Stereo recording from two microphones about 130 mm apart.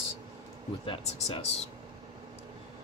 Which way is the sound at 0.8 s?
50° left (ahead or behind).